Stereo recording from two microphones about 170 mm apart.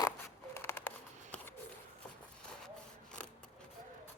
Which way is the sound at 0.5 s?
15° left (ahead or behind).